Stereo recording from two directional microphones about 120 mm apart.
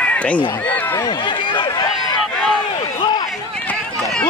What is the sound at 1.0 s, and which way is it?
Run, 40° left (ahead or behind).